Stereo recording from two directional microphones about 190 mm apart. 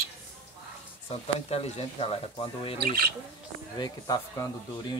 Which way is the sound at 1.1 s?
30° left (ahead or behind).